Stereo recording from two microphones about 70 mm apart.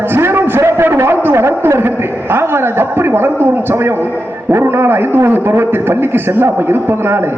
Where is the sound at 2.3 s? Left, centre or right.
Right.